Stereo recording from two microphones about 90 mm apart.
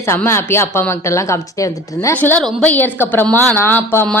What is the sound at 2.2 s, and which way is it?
A woman's voice, 20° left (ahead or behind).